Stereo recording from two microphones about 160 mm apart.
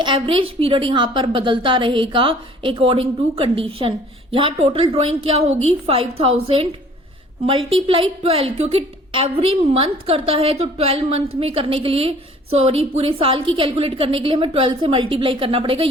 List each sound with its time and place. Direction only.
0.0 s a woman's voice: 30° right (ahead or behind)